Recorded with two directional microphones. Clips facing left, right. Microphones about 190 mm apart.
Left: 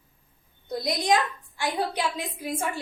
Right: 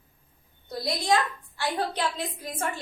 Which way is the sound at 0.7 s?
20° left (ahead or behind).